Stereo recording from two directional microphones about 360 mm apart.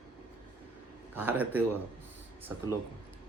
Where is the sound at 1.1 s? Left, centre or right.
Centre.